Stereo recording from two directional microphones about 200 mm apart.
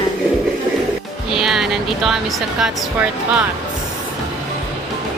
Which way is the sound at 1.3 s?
Centre (ahead or behind).